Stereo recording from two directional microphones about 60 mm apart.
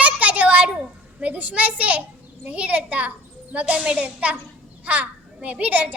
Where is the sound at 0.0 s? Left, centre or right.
Right.